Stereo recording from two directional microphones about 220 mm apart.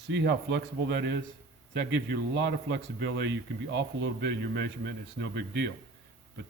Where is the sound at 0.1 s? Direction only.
50° right (ahead or behind).